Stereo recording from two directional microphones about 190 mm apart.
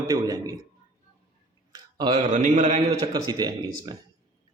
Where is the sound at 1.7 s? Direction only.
20° right (ahead or behind).